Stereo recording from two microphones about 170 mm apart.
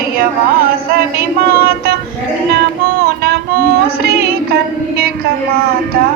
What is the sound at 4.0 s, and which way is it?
Music, 65° right (ahead or behind).